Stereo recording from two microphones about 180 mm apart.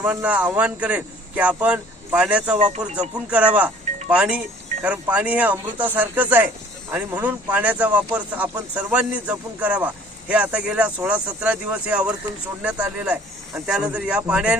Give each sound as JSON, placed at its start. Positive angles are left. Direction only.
{"t": 0.0, "sound": "speech", "side_deg": -5}
{"t": 2.6, "sound": "speech", "side_deg": -40}
{"t": 3.2, "sound": "speech", "side_deg": -5}